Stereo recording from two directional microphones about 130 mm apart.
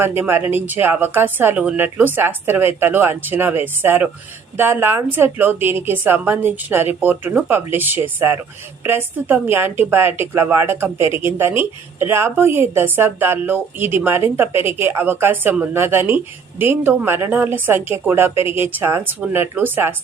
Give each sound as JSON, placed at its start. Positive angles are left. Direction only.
{"t": 0.2, "sound": "a woman's voice", "side_deg": -15}